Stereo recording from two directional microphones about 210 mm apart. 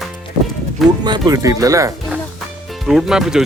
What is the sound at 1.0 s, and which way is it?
Speech, 20° right (ahead or behind).